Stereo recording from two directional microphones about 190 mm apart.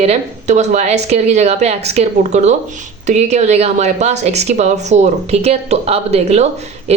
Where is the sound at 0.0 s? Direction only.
35° right (ahead or behind).